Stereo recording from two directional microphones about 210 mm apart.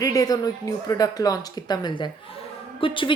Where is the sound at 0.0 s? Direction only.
15° left (ahead or behind).